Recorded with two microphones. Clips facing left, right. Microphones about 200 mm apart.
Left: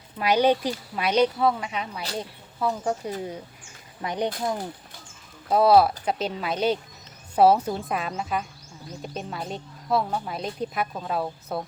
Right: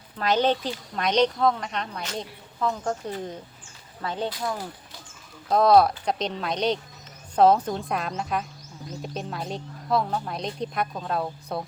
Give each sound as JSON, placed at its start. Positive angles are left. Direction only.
{"t": 0.2, "sound": "speech", "side_deg": 10}
{"t": 5.5, "sound": "speech", "side_deg": 5}